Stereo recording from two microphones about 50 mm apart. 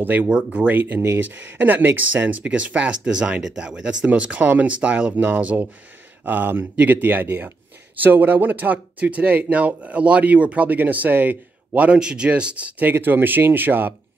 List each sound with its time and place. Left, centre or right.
0.0 s speech: right
2.4 s speech: right
12.0 s speech: centre
12.9 s speech: right